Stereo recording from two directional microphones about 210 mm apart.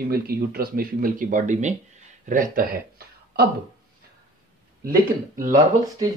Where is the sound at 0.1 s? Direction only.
45° right (ahead or behind).